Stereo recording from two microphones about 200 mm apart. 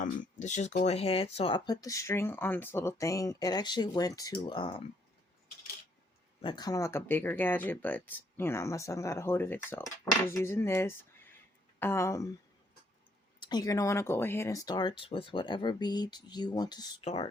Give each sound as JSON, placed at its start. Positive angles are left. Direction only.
{"t": 0.0, "sound": "speech", "side_deg": 35}
{"t": 6.4, "sound": "speech", "side_deg": 20}
{"t": 13.4, "sound": "speech", "side_deg": 20}
{"t": 17.0, "sound": "speech", "side_deg": 30}